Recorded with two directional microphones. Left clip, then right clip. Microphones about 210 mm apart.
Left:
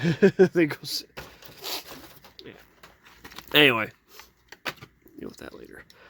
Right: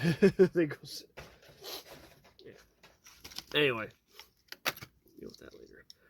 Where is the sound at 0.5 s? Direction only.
25° left (ahead or behind).